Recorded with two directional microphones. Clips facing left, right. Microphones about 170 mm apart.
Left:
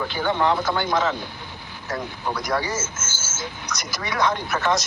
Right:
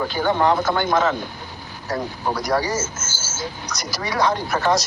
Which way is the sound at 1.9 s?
35° right (ahead or behind).